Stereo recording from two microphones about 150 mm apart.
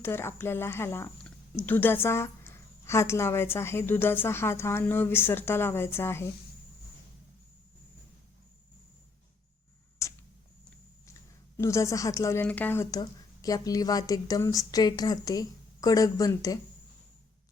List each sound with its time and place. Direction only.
0.0 s a woman's voice: 15° left (ahead or behind)
10.0 s a sound: 20° left (ahead or behind)
11.5 s speech: 20° left (ahead or behind)